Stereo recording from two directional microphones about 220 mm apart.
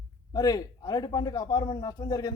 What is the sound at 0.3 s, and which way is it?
A man's voice, 15° left (ahead or behind).